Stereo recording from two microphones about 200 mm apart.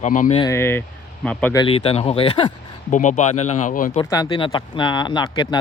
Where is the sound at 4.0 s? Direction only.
20° left (ahead or behind).